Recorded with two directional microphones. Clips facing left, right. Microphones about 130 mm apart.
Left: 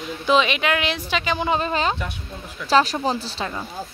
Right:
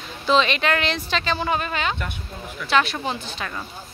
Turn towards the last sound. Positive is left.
turn(degrees=35)  # may be behind; listen again after turning